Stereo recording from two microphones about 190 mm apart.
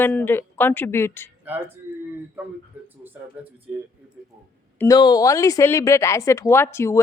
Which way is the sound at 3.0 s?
10° right (ahead or behind).